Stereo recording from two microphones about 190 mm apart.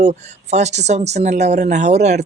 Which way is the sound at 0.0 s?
35° right (ahead or behind).